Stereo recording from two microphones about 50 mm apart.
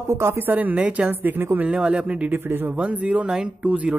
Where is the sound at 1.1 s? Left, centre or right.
Right.